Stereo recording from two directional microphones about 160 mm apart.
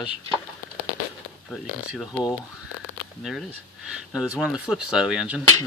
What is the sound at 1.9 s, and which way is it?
Speech, centre (ahead or behind).